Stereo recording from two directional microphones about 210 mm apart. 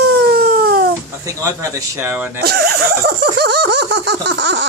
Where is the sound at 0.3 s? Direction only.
45° right (ahead or behind).